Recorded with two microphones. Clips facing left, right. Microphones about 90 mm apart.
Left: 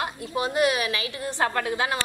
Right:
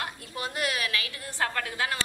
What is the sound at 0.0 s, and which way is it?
A woman's voice, 20° left (ahead or behind).